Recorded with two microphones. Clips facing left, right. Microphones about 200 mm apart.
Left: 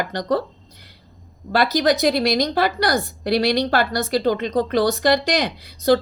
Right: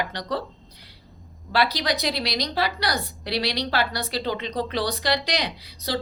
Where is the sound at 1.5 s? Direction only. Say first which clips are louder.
Left 6 dB; 45° left (ahead or behind).